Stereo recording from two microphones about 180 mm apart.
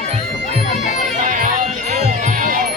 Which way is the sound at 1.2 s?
45° right (ahead or behind).